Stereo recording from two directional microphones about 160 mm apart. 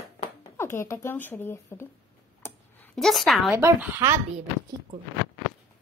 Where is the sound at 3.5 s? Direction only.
15° right (ahead or behind).